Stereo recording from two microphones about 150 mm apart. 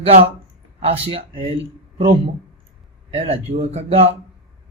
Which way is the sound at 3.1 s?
40° right (ahead or behind).